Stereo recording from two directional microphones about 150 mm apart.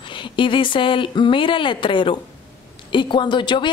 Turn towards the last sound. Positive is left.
turn(degrees=30)  # may be behind; listen again after turning